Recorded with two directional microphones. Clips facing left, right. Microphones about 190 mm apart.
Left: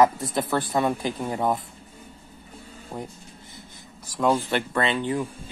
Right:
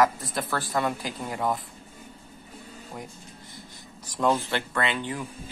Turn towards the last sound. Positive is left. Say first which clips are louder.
# left 4 dB
turn(degrees=20)  # may be behind; listen again after turning